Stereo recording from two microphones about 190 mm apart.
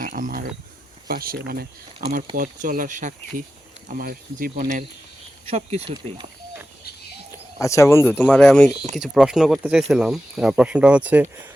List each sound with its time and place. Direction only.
0.0 s a sound: 50° right (ahead or behind)
1.0 s speech: 50° right (ahead or behind)
5.5 s speech: 30° right (ahead or behind)
7.6 s speech: 15° left (ahead or behind); by 11.3 s 10° right (ahead or behind)